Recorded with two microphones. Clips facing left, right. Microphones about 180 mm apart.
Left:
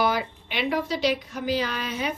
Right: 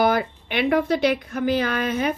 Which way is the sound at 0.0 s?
50° right (ahead or behind).